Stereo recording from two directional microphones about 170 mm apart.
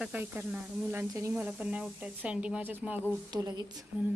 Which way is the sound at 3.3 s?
20° right (ahead or behind).